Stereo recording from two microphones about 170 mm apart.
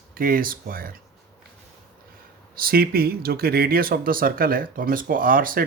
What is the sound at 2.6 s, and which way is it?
Speech, 60° right (ahead or behind).